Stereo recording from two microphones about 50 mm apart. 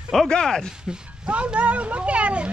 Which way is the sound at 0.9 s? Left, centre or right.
Right.